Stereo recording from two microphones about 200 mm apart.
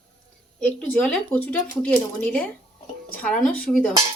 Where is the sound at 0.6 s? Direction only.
5° left (ahead or behind).